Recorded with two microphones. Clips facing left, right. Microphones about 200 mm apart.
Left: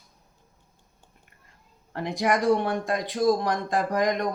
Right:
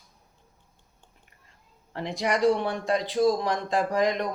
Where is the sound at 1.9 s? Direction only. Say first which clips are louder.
Left 2 dB; 50° left (ahead or behind).